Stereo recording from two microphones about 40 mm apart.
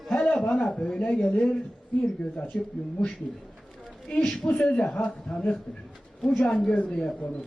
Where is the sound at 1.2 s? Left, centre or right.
Left.